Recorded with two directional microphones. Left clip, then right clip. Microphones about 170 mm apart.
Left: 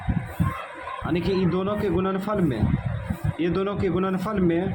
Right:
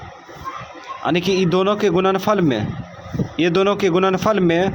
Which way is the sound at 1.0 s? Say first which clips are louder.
Right 7 dB; 45° right (ahead or behind).